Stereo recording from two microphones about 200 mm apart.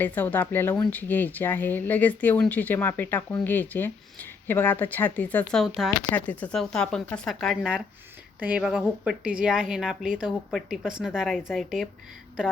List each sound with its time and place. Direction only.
0.0 s a woman's voice: 10° left (ahead or behind)